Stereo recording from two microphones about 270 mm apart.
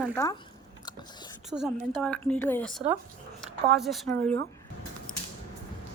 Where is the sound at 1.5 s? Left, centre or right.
Centre.